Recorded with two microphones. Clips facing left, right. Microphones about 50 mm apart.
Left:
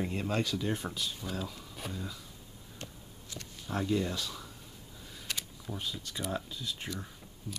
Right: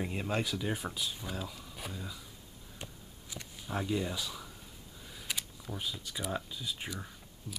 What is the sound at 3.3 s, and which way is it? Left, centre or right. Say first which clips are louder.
Speech: left 1 dB; centre.